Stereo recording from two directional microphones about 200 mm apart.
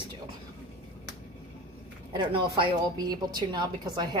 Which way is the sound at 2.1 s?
25° right (ahead or behind).